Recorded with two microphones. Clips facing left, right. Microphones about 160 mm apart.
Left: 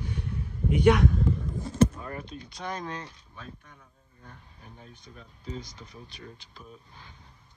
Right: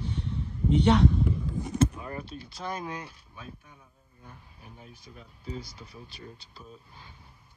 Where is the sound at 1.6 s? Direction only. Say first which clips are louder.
Left 3 dB; 15° right (ahead or behind).